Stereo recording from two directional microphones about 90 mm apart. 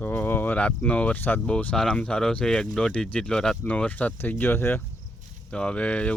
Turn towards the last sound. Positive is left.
turn(degrees=15)  # may be behind; listen again after turning